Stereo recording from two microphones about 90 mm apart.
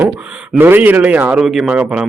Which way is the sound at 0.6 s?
20° right (ahead or behind).